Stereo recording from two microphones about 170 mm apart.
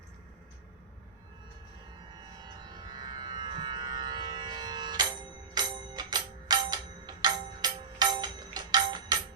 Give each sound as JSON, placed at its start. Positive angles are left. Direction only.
{"t": 2.4, "sound": "music", "side_deg": -25}